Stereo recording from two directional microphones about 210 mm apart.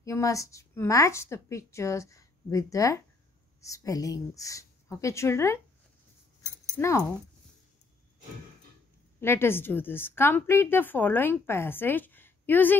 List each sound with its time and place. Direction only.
0.0 s a woman's voice: 15° left (ahead or behind)
6.8 s a woman's voice: 15° left (ahead or behind)
9.2 s a woman's voice: 10° left (ahead or behind)